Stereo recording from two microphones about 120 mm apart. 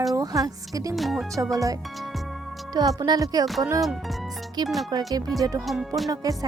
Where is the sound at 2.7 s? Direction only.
35° right (ahead or behind).